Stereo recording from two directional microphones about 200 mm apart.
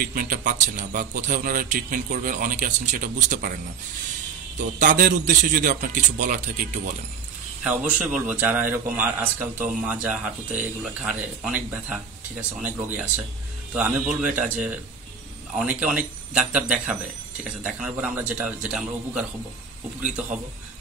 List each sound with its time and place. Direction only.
0.0 s a man's voice: 45° right (ahead or behind)
7.6 s a man's voice: 5° right (ahead or behind)